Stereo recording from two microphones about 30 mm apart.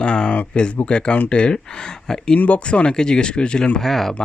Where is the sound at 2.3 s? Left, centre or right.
Left.